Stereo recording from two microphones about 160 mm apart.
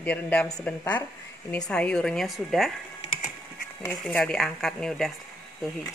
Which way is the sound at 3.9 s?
5° left (ahead or behind).